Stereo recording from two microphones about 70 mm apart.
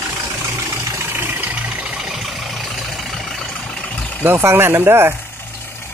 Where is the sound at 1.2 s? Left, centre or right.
Right.